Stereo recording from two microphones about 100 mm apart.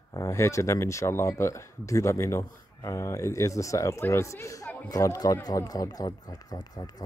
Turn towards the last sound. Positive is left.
turn(degrees=40)  # may be behind; listen again after turning